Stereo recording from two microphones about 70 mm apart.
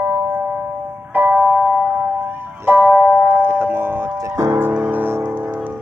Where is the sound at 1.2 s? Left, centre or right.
Right.